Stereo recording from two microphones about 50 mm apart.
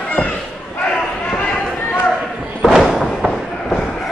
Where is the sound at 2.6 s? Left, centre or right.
Centre.